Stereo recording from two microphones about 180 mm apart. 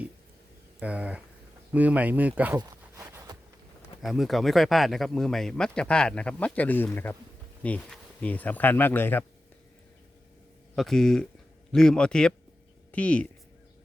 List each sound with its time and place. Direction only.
0.8 s speech: 5° right (ahead or behind)
2.6 s a sound: 20° right (ahead or behind)
4.0 s speech: centre (ahead or behind)
10.8 s speech: centre (ahead or behind)